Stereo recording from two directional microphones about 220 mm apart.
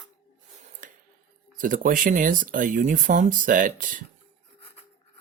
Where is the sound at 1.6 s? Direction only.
40° right (ahead or behind).